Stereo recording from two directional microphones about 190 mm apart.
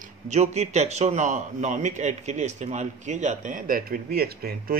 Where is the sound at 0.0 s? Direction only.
35° right (ahead or behind).